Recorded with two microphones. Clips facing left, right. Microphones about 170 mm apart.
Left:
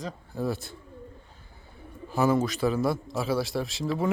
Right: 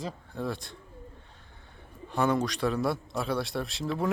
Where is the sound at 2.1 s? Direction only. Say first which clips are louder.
Left 3 dB; 5° left (ahead or behind).